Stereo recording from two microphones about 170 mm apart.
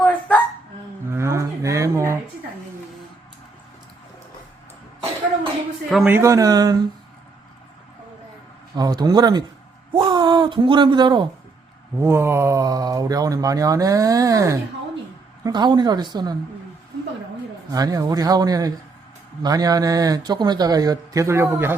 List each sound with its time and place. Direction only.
0.0 s hiccup: 10° left (ahead or behind)
1.1 s a sound: 15° right (ahead or behind)
6.1 s speech: 15° right (ahead or behind)
8.7 s speech: 25° right (ahead or behind)
11.9 s speech: 15° right (ahead or behind)
17.7 s speech: 20° right (ahead or behind)